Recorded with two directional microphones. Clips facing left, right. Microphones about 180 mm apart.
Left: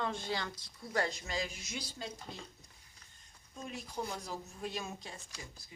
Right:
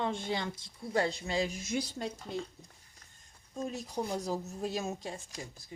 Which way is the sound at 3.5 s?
40° right (ahead or behind).